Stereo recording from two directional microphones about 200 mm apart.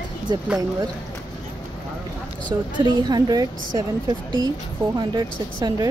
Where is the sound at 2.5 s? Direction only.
15° right (ahead or behind).